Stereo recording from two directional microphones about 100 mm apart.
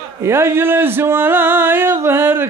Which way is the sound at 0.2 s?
25° right (ahead or behind).